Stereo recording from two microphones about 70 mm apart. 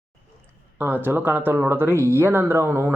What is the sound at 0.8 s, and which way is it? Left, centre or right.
Speech, right.